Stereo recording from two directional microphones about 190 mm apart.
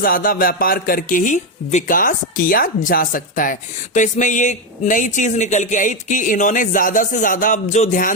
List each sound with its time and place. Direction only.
0.0 s speech: 50° left (ahead or behind)